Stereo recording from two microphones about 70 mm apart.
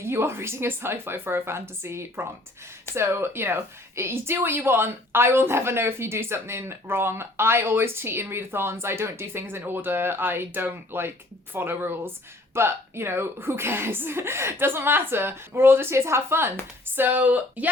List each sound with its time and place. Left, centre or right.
0.0 s a woman's voice: right